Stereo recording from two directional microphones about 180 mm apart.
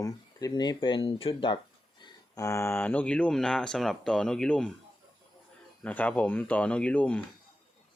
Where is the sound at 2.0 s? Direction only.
15° left (ahead or behind).